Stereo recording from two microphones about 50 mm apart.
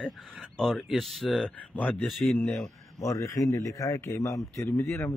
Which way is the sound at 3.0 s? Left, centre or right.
Left.